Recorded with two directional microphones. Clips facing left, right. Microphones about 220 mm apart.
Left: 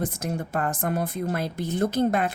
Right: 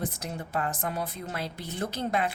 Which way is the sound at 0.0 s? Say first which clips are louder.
Left 6 dB; 50° left (ahead or behind).